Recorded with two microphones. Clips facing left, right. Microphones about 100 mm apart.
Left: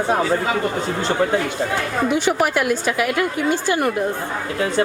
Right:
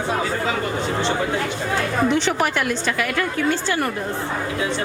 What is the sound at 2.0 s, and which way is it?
A woman's voice, 10° left (ahead or behind).